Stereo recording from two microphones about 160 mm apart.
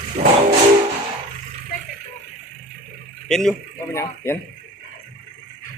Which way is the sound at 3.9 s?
15° left (ahead or behind).